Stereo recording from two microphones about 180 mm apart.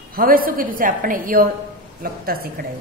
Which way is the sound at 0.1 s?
55° right (ahead or behind).